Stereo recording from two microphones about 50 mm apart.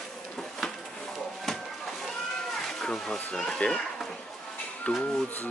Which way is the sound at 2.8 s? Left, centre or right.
Centre.